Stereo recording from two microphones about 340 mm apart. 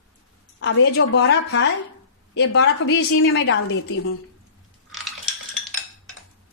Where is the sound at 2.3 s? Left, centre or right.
Left.